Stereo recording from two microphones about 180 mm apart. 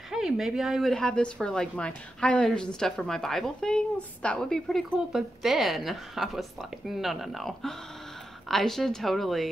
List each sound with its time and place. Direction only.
0.1 s speech: centre (ahead or behind)